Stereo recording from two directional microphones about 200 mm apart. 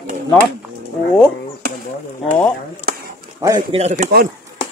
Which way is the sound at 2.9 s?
50° right (ahead or behind).